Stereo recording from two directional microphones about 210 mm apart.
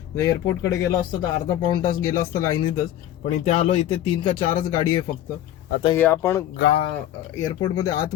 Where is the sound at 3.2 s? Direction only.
30° left (ahead or behind).